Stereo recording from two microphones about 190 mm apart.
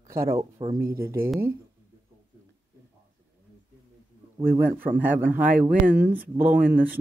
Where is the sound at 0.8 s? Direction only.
50° right (ahead or behind).